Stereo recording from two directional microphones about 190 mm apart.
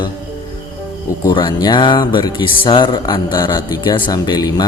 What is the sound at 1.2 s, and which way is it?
Speech, 25° left (ahead or behind).